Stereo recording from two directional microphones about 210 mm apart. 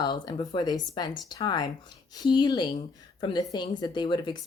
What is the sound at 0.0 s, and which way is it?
Speech, 20° left (ahead or behind).